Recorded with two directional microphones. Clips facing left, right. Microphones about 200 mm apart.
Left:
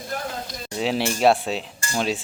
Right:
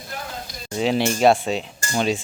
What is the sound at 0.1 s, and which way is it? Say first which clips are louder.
Sizzle: left 4 dB; 45° left (ahead or behind).